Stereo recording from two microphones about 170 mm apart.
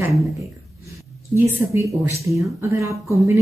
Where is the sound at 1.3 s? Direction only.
15° right (ahead or behind).